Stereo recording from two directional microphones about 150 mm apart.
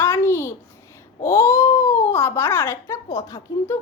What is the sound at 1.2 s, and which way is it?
A child's voice, 20° left (ahead or behind).